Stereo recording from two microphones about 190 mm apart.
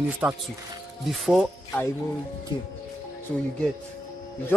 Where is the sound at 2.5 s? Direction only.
25° left (ahead or behind).